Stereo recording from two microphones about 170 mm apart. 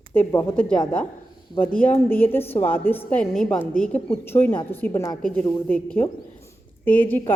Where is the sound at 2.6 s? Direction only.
10° left (ahead or behind).